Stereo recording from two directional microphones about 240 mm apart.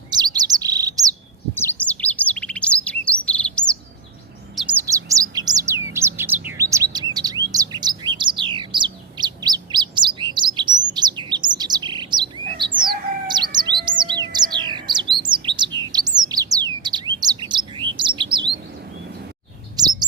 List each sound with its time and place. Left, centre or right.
0.1 s bird: centre
1.5 s chirp: centre
4.9 s bird: centre
12.8 s chirp: centre
14.1 s bird: centre
17.9 s chirp: centre
19.7 s chirp: centre